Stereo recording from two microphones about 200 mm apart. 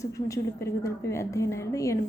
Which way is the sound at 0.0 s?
15° left (ahead or behind).